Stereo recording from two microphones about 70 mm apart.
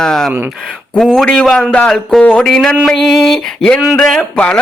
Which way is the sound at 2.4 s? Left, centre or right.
Centre.